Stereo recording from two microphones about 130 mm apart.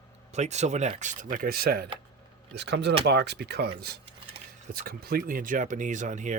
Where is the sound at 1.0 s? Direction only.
75° right (ahead or behind).